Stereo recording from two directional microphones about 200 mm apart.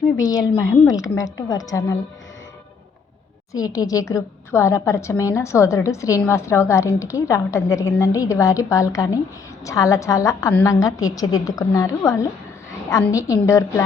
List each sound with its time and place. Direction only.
0.2 s a woman's voice: 15° left (ahead or behind)
3.5 s a woman's voice: 20° left (ahead or behind)